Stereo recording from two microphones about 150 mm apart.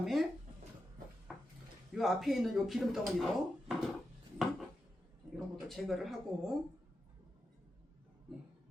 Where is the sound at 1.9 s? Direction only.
Centre (ahead or behind).